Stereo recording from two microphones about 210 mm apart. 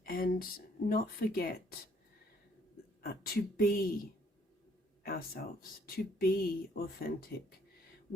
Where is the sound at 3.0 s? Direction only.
45° left (ahead or behind).